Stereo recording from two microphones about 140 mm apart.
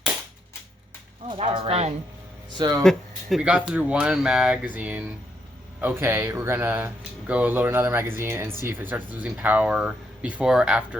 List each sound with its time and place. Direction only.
1.3 s speech: 40° right (ahead or behind)
2.6 s speech: 20° right (ahead or behind)
2.8 s speech: centre (ahead or behind)